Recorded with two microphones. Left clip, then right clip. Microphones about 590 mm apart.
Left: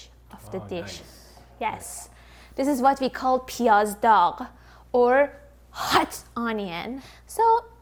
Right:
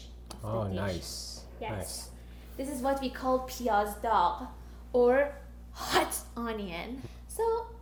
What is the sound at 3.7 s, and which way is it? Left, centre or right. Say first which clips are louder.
Speech: left 10 dB; left.